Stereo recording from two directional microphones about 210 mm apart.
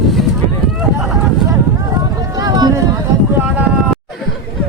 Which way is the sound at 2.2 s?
15° right (ahead or behind).